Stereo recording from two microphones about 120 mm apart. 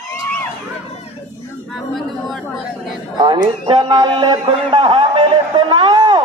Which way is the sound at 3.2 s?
35° right (ahead or behind).